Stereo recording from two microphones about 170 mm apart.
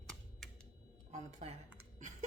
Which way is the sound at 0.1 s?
Centre (ahead or behind).